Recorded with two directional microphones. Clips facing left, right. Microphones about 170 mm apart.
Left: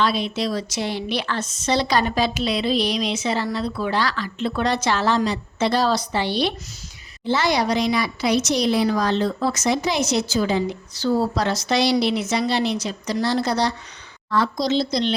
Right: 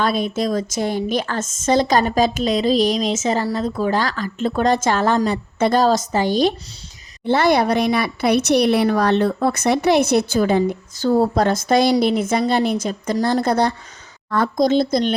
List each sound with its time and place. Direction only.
0.0 s a woman's voice: 50° right (ahead or behind)
7.3 s a woman's voice: 55° right (ahead or behind)